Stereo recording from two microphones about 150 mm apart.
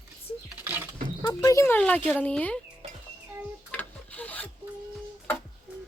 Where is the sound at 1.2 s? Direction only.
20° left (ahead or behind).